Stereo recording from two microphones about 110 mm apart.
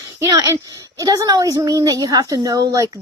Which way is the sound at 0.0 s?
25° right (ahead or behind).